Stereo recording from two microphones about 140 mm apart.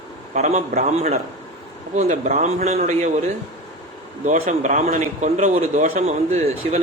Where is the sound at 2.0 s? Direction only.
60° right (ahead or behind).